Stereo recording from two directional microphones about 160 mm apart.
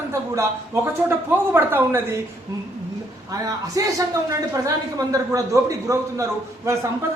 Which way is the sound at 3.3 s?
20° right (ahead or behind).